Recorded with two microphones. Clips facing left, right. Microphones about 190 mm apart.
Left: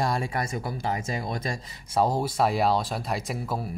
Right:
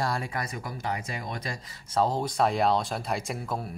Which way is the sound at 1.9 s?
10° left (ahead or behind).